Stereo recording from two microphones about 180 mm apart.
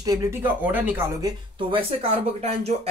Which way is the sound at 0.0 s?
20° right (ahead or behind).